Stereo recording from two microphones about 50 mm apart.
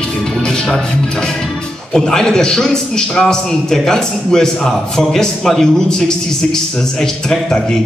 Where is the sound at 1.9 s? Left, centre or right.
Centre.